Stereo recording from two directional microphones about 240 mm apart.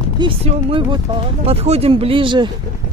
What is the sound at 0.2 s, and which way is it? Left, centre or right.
Speech, right.